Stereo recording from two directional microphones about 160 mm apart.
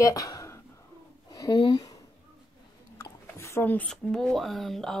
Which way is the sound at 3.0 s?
15° left (ahead or behind).